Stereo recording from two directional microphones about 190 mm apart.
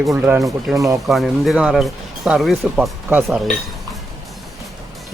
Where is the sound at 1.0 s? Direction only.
Centre (ahead or behind).